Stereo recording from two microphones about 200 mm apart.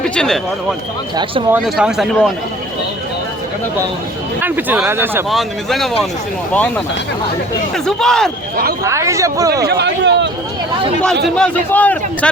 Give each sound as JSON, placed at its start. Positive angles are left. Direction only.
{"t": 0.2, "sound": "speech", "side_deg": 0}
{"t": 1.1, "sound": "speech", "side_deg": -25}
{"t": 1.5, "sound": "speech", "side_deg": -5}
{"t": 4.4, "sound": "speech", "side_deg": -10}
{"t": 5.3, "sound": "a man's voice", "side_deg": 0}
{"t": 7.9, "sound": "speech", "side_deg": 0}
{"t": 8.8, "sound": "speech", "side_deg": -15}
{"t": 9.6, "sound": "speech", "side_deg": -55}
{"t": 11.3, "sound": "a man's voice", "side_deg": 5}